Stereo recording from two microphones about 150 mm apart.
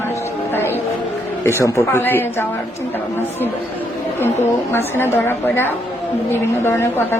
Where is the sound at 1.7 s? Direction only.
15° left (ahead or behind).